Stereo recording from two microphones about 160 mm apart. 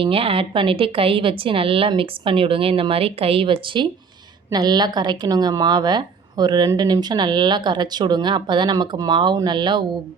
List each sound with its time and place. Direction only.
0.0 s a woman's voice: 35° right (ahead or behind)